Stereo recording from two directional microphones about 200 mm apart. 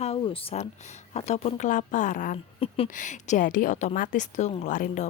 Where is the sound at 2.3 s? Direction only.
30° left (ahead or behind).